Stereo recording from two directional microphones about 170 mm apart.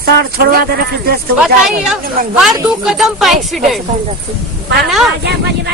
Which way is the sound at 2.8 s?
Centre (ahead or behind).